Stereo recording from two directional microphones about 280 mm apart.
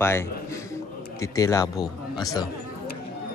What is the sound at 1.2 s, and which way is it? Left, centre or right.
A man's voice, centre.